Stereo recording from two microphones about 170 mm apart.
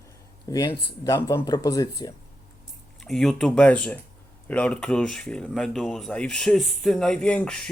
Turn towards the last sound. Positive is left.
turn(degrees=5)  # may be behind; listen again after turning